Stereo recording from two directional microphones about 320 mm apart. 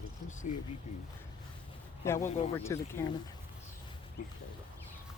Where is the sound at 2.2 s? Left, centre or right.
Left.